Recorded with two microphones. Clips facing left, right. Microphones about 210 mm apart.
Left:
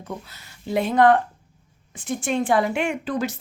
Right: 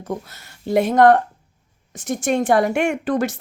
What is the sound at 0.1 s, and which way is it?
A woman's voice, 40° right (ahead or behind).